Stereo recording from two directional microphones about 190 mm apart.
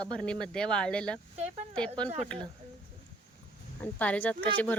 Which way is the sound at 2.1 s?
30° right (ahead or behind).